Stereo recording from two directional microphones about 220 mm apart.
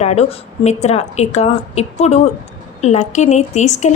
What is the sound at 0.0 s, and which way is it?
A woman's voice, 30° left (ahead or behind).